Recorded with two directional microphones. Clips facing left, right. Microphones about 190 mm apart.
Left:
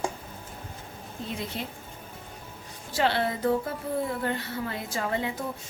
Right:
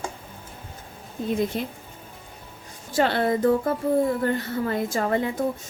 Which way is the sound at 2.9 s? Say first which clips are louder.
Right 5 dB; 50° right (ahead or behind).